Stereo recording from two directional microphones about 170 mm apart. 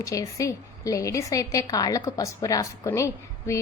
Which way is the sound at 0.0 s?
20° left (ahead or behind).